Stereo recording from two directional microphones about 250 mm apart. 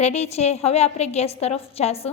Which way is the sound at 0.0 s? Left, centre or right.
Left.